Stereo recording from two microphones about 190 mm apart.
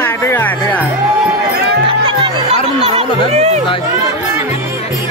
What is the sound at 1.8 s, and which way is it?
Music, 30° right (ahead or behind).